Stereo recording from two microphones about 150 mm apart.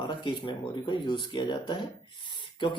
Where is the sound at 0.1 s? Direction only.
35° left (ahead or behind).